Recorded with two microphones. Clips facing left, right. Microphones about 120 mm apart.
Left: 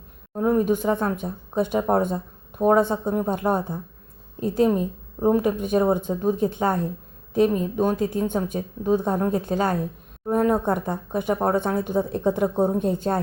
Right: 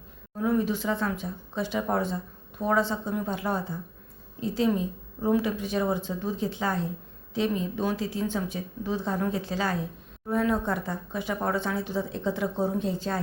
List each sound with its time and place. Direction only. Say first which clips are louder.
0.3 s speech: left 5 dB; 45° left (ahead or behind)